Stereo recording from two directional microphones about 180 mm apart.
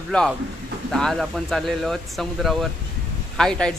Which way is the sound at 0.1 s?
5° left (ahead or behind).